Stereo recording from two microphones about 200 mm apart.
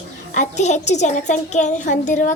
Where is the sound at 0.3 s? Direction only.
35° left (ahead or behind).